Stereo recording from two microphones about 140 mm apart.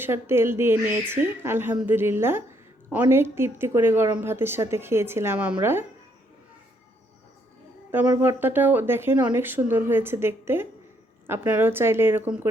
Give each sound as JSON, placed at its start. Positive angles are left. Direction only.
{"t": 0.0, "sound": "a woman's voice", "side_deg": -15}
{"t": 8.2, "sound": "a woman's voice", "side_deg": -15}